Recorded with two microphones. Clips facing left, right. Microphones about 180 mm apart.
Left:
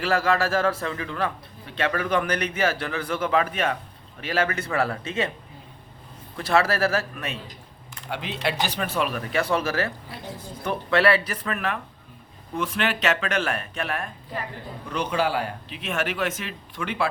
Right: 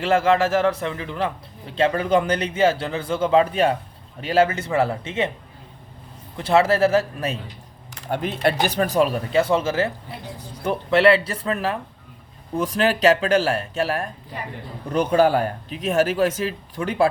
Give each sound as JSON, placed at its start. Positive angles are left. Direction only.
{"t": 0.0, "sound": "a man's voice", "side_deg": -25}
{"t": 6.3, "sound": "a man's voice", "side_deg": -25}
{"t": 8.1, "sound": "speech", "side_deg": -50}
{"t": 8.8, "sound": "a man's voice", "side_deg": -35}
{"t": 14.8, "sound": "speech", "side_deg": -45}